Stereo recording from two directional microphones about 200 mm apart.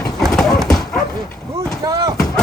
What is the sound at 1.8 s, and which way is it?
Speech, 15° right (ahead or behind).